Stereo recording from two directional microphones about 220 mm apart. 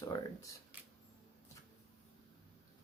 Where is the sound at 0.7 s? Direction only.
10° right (ahead or behind).